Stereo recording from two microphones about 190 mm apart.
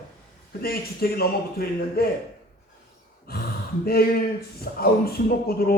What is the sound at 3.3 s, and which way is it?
A man's voice, 55° left (ahead or behind).